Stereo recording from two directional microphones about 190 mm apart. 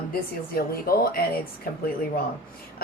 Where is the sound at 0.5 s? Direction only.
50° left (ahead or behind).